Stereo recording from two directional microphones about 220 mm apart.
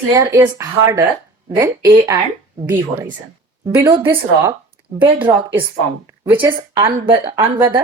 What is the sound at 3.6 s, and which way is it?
A woman's voice, 15° right (ahead or behind).